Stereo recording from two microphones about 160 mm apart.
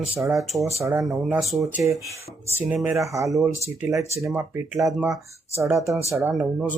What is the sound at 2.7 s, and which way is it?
Speech, 15° right (ahead or behind).